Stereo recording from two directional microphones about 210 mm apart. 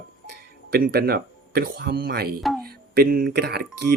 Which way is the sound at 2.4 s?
Centre (ahead or behind).